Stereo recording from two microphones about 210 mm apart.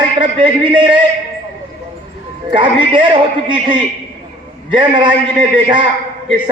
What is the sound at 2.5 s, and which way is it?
A man's voice, 25° right (ahead or behind).